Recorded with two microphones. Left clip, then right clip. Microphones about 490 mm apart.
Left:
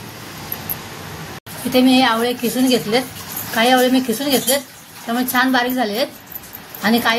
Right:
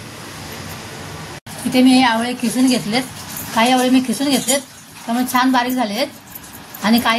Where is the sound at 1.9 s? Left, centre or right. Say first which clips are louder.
Right 1 dB; left.